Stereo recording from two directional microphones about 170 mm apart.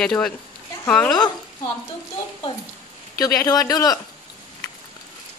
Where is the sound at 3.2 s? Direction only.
20° left (ahead or behind).